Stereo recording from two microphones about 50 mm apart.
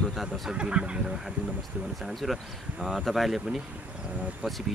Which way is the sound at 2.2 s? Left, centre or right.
Centre.